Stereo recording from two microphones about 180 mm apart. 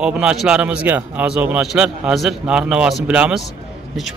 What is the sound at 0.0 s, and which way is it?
Speech, 5° right (ahead or behind).